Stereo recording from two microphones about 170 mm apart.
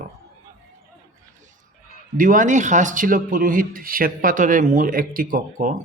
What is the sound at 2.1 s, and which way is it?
Speech, 50° right (ahead or behind).